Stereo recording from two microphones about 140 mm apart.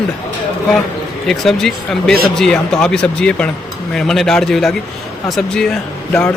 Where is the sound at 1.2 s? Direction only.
Centre (ahead or behind).